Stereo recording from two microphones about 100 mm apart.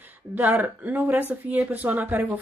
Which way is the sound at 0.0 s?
20° right (ahead or behind).